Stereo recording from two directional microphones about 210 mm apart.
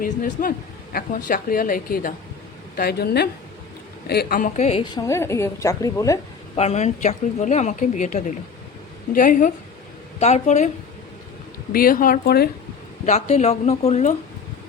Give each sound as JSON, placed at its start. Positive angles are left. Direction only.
{"t": 0.0, "sound": "a woman's voice", "side_deg": 40}
{"t": 6.6, "sound": "a woman's voice", "side_deg": 30}
{"t": 11.7, "sound": "speech", "side_deg": 45}
{"t": 13.1, "sound": "a woman's voice", "side_deg": 30}